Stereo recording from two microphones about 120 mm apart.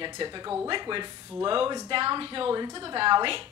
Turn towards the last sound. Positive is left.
turn(degrees=-45)  # may be behind; listen again after turning